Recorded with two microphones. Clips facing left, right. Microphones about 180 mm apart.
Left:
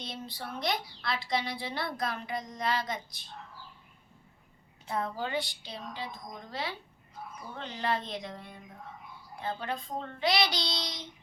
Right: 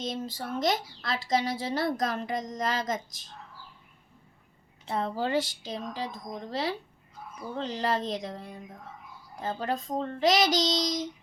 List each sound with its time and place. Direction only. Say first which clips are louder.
0.0 s a woman's voice: right 7 dB; 45° right (ahead or behind)
4.9 s speech: right 4 dB; 30° right (ahead or behind)